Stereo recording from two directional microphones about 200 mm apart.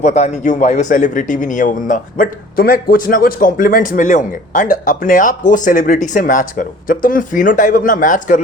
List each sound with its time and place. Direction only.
0.0 s a man's voice: 35° left (ahead or behind)